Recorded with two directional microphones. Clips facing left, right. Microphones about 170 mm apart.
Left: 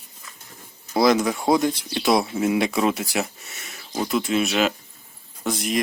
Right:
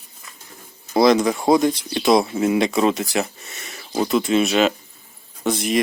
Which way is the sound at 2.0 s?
15° right (ahead or behind).